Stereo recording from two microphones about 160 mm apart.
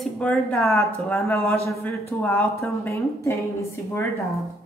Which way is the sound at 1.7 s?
15° left (ahead or behind).